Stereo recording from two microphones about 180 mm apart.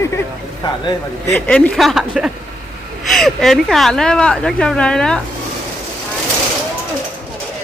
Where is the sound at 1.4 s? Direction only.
10° left (ahead or behind).